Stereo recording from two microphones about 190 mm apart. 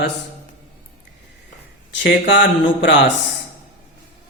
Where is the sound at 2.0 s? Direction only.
70° left (ahead or behind).